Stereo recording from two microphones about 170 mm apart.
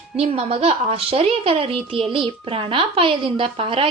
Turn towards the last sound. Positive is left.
turn(degrees=-30)  # may be behind; listen again after turning